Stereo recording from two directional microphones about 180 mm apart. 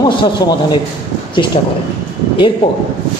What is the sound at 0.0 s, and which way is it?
Speech, 25° left (ahead or behind).